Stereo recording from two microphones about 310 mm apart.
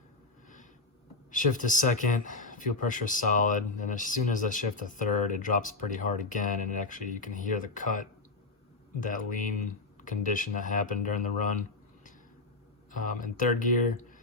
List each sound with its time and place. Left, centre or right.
1.3 s speech: left
12.9 s speech: left